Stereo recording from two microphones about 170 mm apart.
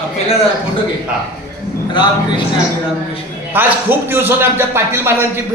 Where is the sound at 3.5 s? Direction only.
10° right (ahead or behind).